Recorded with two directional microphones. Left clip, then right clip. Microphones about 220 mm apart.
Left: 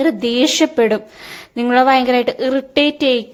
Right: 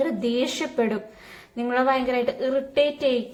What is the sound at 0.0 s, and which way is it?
A woman's voice, 45° left (ahead or behind).